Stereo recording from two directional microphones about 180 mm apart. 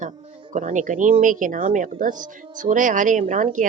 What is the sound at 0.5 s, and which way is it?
Speech, 45° right (ahead or behind).